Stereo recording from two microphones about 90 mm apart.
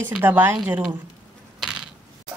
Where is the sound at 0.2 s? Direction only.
25° right (ahead or behind).